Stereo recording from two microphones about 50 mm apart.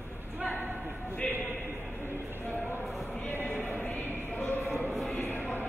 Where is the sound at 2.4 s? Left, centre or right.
Left.